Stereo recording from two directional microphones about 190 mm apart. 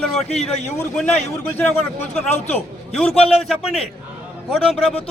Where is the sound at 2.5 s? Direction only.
5° left (ahead or behind).